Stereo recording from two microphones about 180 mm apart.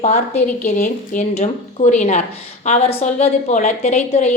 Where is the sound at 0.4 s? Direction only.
45° left (ahead or behind).